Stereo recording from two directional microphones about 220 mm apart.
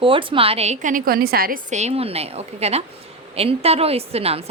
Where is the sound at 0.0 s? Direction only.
25° right (ahead or behind).